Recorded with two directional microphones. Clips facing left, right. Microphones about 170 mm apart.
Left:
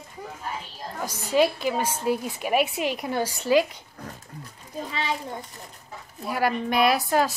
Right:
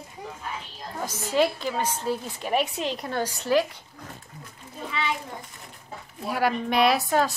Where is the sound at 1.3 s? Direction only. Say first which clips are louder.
Left 2 dB; 15° left (ahead or behind).